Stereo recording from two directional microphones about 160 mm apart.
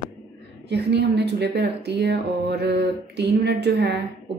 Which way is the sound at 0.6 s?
90° right.